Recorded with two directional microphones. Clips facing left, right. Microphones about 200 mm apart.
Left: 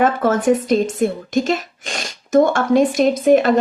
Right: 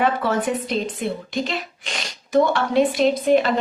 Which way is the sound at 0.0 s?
45° left (ahead or behind).